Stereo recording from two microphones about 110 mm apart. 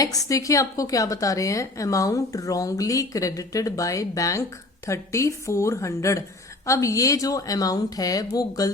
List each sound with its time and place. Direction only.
0.0 s a woman's voice: 35° left (ahead or behind)